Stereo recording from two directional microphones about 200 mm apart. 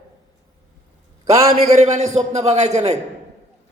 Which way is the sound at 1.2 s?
30° right (ahead or behind).